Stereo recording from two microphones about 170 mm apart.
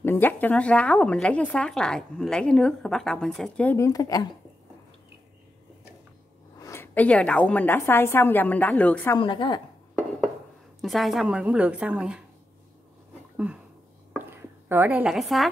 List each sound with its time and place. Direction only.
0.0 s speech: 10° left (ahead or behind)
3.7 s speech: 20° left (ahead or behind)
6.6 s a woman's voice: 15° left (ahead or behind)
9.2 s speech: 30° left (ahead or behind)
10.8 s speech: centre (ahead or behind)
13.4 s a sound: 5° right (ahead or behind)